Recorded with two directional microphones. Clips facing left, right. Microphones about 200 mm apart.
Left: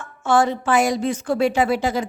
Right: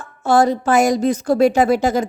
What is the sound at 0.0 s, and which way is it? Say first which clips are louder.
A woman's voice: right 3 dB; 35° right (ahead or behind).